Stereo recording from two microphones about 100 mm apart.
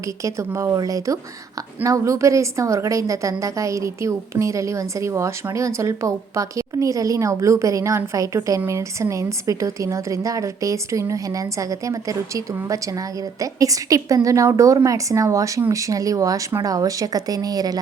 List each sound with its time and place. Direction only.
0.2 s a woman's voice: 30° right (ahead or behind)
13.4 s a woman's voice: 35° right (ahead or behind)